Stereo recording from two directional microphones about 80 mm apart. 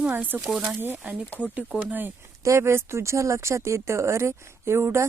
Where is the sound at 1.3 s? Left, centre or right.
Centre.